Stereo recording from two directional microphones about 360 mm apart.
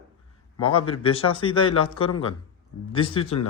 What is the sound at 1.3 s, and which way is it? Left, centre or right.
A man's voice, centre.